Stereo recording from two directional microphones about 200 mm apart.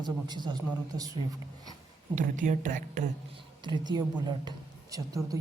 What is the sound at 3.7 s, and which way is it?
A man's voice, 20° right (ahead or behind).